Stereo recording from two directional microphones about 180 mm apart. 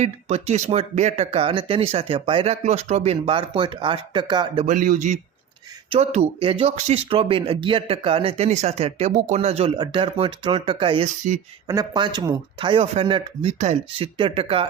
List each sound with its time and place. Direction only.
0.0 s speech: 35° right (ahead or behind)
4.6 s a man's voice: 45° right (ahead or behind); by 14.7 s 30° right (ahead or behind)